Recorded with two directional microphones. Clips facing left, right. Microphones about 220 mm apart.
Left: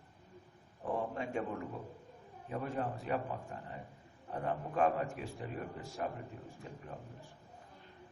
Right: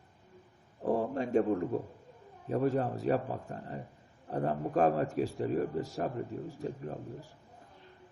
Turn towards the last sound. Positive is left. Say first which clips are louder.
# right 8 dB
turn(degrees=-40)  # may be behind; listen again after turning